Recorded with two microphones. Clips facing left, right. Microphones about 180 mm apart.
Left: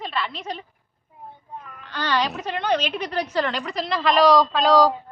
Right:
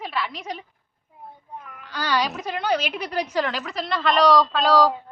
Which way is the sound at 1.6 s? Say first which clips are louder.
Left 1 dB; 10° right (ahead or behind).